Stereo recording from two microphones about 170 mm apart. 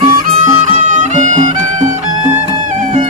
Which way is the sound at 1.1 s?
45° right (ahead or behind).